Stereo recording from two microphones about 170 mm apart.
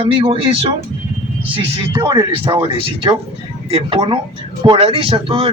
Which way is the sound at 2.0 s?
25° right (ahead or behind).